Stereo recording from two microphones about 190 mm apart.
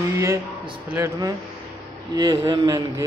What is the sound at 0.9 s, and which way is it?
Mantra, 15° right (ahead or behind).